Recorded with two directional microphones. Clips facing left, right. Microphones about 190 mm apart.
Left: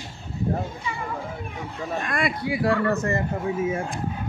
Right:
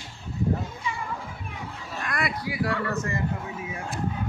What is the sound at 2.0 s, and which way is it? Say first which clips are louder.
Speech: left 1 dB; 25° left (ahead or behind).